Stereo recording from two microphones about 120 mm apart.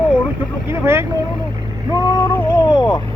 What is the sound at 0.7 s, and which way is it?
Speech, 20° right (ahead or behind).